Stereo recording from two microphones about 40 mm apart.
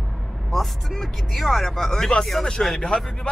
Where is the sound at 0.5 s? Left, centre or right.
Centre.